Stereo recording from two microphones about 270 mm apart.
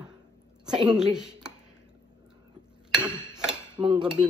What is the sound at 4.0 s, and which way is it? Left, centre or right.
Dishes, centre.